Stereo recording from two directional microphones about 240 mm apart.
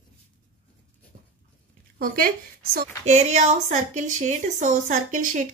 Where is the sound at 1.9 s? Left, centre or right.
Right.